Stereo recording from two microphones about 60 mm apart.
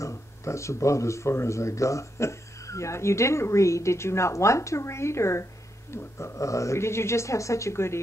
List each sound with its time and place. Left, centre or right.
0.0 s speech: left